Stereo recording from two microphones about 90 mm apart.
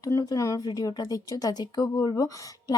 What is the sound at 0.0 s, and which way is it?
Speech, 40° left (ahead or behind).